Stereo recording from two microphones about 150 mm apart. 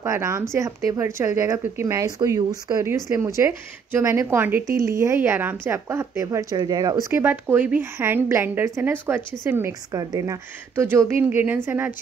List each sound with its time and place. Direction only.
0.0 s speech: 20° right (ahead or behind)